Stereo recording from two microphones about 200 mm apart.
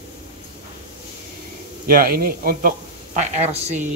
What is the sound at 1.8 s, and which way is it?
Speech, 45° right (ahead or behind).